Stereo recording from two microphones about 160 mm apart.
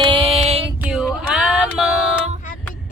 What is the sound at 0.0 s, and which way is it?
Music, 35° right (ahead or behind).